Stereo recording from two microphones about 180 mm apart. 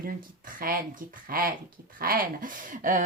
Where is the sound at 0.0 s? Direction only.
55° right (ahead or behind).